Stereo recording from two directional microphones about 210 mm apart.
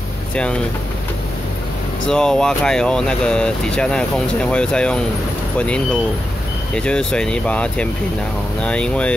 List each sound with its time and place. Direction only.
2.0 s speech: 5° left (ahead or behind)
6.7 s speech: 5° left (ahead or behind)